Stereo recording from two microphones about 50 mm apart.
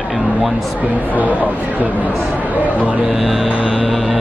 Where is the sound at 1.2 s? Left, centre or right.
Left.